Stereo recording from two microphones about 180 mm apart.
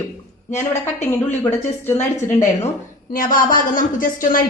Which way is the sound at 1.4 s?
10° left (ahead or behind).